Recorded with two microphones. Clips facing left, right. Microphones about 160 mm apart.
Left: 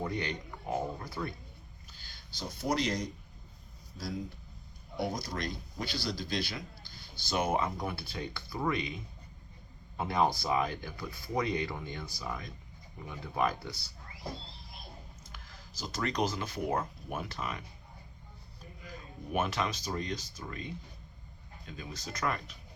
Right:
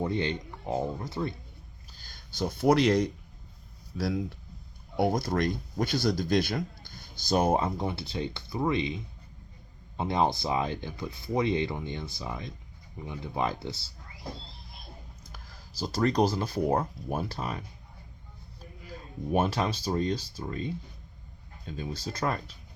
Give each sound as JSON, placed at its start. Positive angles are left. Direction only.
{"t": 0.0, "sound": "speech", "side_deg": -25}
{"t": 1.9, "sound": "speech", "side_deg": -45}
{"t": 4.9, "sound": "speech", "side_deg": -55}
{"t": 10.0, "sound": "speech", "side_deg": -20}
{"t": 15.3, "sound": "speech", "side_deg": -35}
{"t": 19.3, "sound": "speech", "side_deg": -35}